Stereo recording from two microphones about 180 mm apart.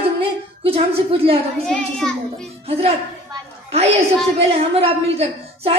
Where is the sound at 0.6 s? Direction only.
30° right (ahead or behind).